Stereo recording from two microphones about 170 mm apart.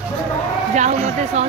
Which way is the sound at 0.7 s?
45° right (ahead or behind).